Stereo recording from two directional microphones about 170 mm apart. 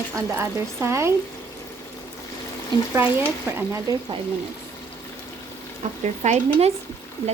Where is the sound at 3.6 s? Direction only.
15° right (ahead or behind).